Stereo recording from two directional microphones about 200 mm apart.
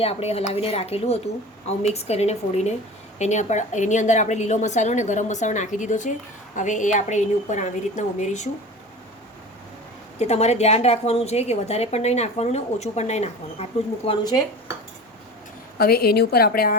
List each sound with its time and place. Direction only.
0.0 s a woman's voice: 30° left (ahead or behind)
10.2 s a woman's voice: 35° left (ahead or behind)
15.8 s a woman's voice: 50° left (ahead or behind)